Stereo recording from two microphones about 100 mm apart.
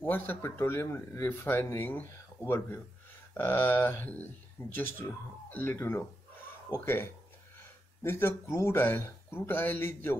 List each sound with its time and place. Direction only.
0.0 s speech: 20° left (ahead or behind)